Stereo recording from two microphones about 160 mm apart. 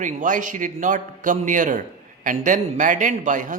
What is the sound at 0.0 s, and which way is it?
A man's voice, 55° right (ahead or behind).